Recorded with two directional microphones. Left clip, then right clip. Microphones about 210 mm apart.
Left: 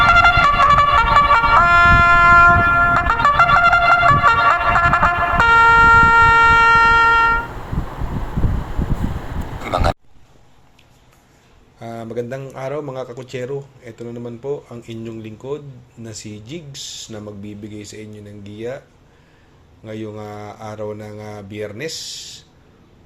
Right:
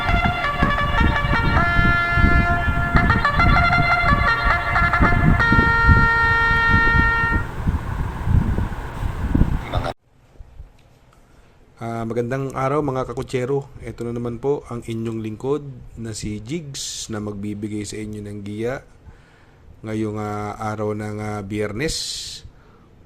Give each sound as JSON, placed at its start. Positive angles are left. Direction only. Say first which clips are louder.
{"t": 0.0, "sound": "vehicle", "louder": "left 10 dB", "side_deg": 30}
{"t": 9.6, "sound": "vehicle", "louder": "left 7 dB", "side_deg": 35}
{"t": 11.8, "sound": "a man's voice", "louder": "right 2 dB", "side_deg": -45}
{"t": 19.8, "sound": "a man's voice", "louder": "right 4 dB", "side_deg": -50}